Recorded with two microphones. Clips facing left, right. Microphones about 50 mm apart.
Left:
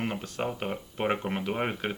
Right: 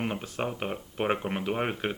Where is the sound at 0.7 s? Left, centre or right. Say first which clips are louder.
Even; centre.